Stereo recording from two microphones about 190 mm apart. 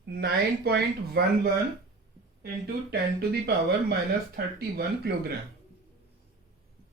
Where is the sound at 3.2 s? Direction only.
55° right (ahead or behind).